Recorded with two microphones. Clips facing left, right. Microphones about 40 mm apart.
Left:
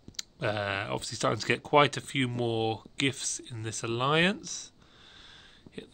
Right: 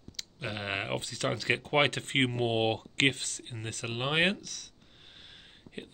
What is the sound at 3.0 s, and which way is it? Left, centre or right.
Speech, right.